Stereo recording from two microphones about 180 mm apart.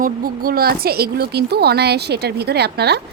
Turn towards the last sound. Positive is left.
turn(degrees=-65)  # may be behind; listen again after turning